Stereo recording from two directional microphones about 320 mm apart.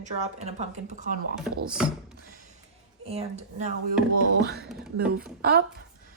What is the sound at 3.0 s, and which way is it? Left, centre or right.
Speech, centre.